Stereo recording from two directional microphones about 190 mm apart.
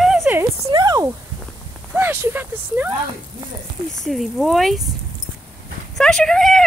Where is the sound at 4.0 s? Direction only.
Centre (ahead or behind).